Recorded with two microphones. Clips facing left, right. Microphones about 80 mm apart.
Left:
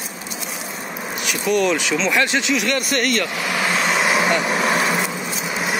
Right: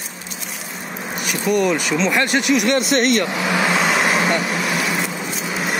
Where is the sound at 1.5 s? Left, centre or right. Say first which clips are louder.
Right 1 dB; centre.